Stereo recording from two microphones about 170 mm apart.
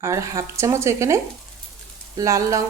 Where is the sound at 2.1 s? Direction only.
20° right (ahead or behind).